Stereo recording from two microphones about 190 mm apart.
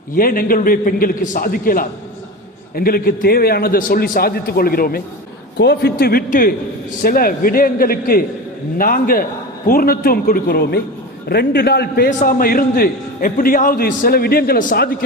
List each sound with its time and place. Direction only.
0.2 s a man's voice: 50° left (ahead or behind)